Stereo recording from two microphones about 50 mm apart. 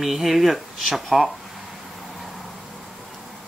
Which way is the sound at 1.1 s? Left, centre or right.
Centre.